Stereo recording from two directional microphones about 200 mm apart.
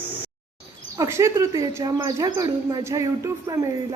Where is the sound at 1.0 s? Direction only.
15° right (ahead or behind).